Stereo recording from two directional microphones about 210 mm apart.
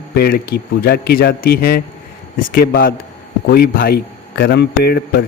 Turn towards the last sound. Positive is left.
turn(degrees=50)  # may be behind; listen again after turning